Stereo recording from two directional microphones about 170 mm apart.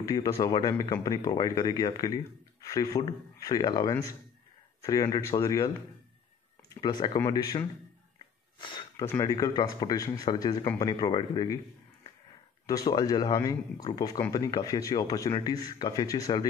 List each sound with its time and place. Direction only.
0.0 s speech: 20° left (ahead or behind)
6.7 s speech: 25° left (ahead or behind)
8.5 s a sound: 25° left (ahead or behind)
9.0 s a man's voice: 15° left (ahead or behind)